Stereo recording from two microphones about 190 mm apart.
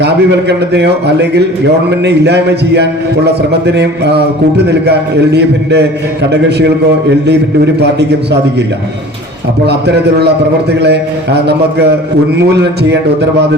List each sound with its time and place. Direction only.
0.0 s a man's voice: 60° right (ahead or behind)
9.6 s a man's voice: 60° right (ahead or behind)
12.4 s a man's voice: 65° right (ahead or behind)